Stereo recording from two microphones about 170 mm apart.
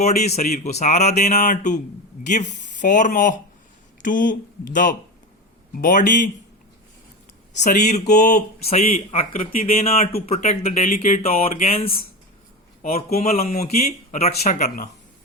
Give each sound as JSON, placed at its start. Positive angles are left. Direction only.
{"t": 0.0, "sound": "a man's voice", "side_deg": 40}
{"t": 7.5, "sound": "speech", "side_deg": 45}
{"t": 9.8, "sound": "a man's voice", "side_deg": 40}
{"t": 11.6, "sound": "a man's voice", "side_deg": 35}
{"t": 12.8, "sound": "speech", "side_deg": 60}
{"t": 13.2, "sound": "a man's voice", "side_deg": 40}
{"t": 13.7, "sound": "speech", "side_deg": 60}
{"t": 14.2, "sound": "speech", "side_deg": 40}